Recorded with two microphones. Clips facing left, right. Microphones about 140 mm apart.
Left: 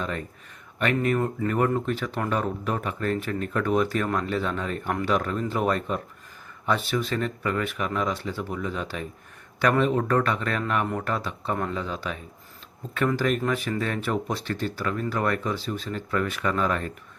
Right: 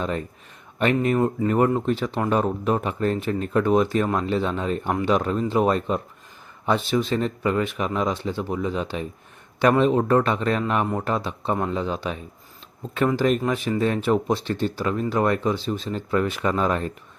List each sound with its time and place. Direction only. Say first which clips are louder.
0.8 s speech: right 4 dB; 30° right (ahead or behind)
13.4 s speech: right 4 dB; 25° right (ahead or behind)